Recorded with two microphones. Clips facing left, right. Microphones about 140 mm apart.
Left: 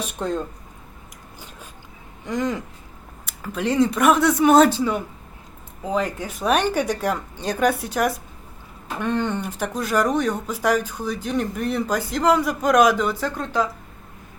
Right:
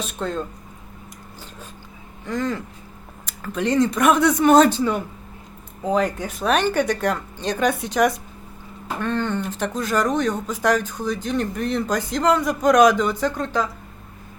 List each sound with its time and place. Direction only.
0.0 s speech: 15° left (ahead or behind)
2.2 s speech: 15° left (ahead or behind)
3.2 s speech: 5° left (ahead or behind)